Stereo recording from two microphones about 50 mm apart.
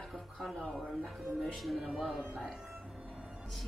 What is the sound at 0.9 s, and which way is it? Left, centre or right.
Speech, centre.